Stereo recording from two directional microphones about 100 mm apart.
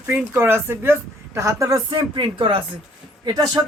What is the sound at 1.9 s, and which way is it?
Speech, 55° right (ahead or behind).